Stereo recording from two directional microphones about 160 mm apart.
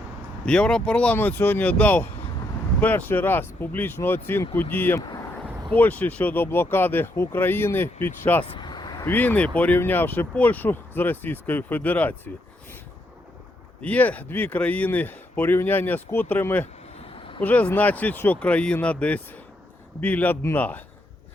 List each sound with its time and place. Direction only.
0.4 s speech: 5° left (ahead or behind)
8.5 s vehicle: 30° left (ahead or behind)
9.0 s speech: 10° left (ahead or behind)
13.8 s speech: 10° left (ahead or behind)